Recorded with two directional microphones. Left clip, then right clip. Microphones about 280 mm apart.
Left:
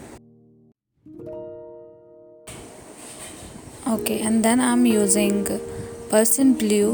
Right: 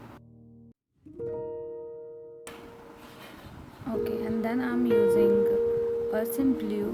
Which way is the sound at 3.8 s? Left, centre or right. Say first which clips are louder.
Left 6 dB; left.